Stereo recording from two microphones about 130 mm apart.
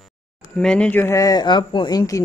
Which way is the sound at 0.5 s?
5° left (ahead or behind).